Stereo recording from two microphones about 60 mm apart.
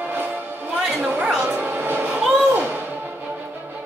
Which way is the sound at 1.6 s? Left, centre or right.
Right.